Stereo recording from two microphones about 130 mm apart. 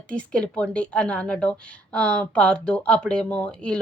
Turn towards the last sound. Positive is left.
turn(degrees=10)  # may be behind; listen again after turning